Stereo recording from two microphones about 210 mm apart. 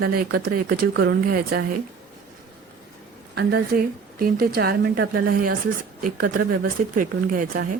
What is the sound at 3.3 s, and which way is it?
Speech, 50° right (ahead or behind).